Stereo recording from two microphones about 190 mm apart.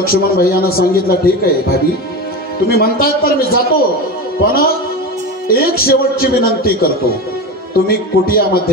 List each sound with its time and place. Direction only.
0.0 s speech: 50° left (ahead or behind)